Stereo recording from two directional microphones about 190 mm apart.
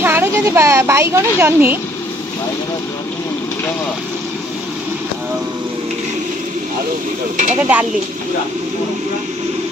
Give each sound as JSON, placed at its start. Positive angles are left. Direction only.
{"t": 0.0, "sound": "speech", "side_deg": -10}
{"t": 7.7, "sound": "speech", "side_deg": -10}